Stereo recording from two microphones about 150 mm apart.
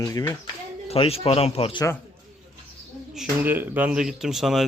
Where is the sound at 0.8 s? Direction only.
40° left (ahead or behind).